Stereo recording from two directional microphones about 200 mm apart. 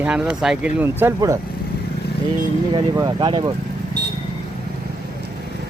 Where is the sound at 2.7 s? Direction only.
20° right (ahead or behind).